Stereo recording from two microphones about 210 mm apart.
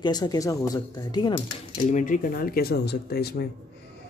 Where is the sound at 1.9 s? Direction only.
40° left (ahead or behind).